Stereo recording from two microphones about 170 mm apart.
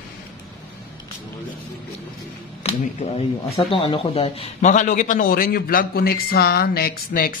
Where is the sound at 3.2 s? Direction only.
35° left (ahead or behind).